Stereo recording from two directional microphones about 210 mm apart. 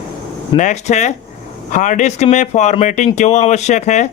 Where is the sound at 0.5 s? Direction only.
35° left (ahead or behind).